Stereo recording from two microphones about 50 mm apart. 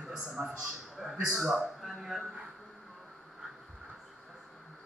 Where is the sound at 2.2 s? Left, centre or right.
Centre.